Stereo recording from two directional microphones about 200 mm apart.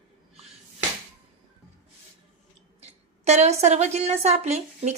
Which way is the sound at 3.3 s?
35° right (ahead or behind).